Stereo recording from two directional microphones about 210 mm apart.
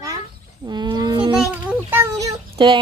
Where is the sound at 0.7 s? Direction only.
20° right (ahead or behind).